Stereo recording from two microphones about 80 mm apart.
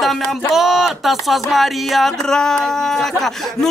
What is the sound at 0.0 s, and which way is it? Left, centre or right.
Speech, centre.